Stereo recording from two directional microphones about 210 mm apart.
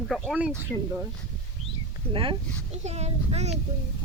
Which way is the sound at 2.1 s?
25° right (ahead or behind).